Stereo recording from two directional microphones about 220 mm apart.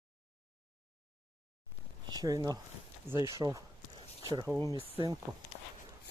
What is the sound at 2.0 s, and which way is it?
Speech, 15° right (ahead or behind).